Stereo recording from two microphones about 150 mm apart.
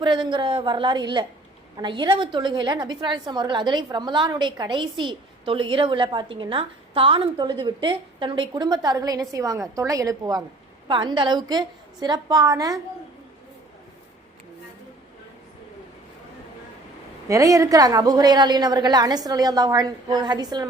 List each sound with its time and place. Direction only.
0.0 s a woman's voice: 30° right (ahead or behind)
17.2 s a woman's voice: 20° right (ahead or behind)